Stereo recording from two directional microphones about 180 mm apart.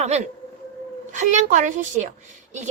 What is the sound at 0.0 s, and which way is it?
A woman's voice, 35° right (ahead or behind).